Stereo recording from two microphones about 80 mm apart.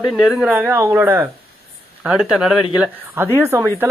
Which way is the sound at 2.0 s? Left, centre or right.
Centre.